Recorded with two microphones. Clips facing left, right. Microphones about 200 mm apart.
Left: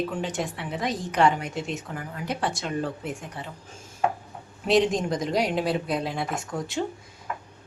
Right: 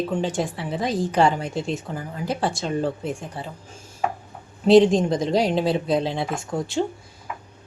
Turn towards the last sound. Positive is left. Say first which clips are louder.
# right 4 dB
turn(degrees=-30)  # may be behind; listen again after turning